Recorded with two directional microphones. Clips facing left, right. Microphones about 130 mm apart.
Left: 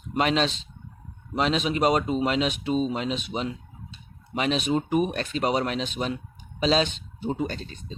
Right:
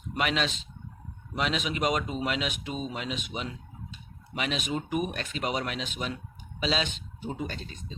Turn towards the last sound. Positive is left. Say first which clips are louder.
# left 5 dB
turn(degrees=35)  # may be behind; listen again after turning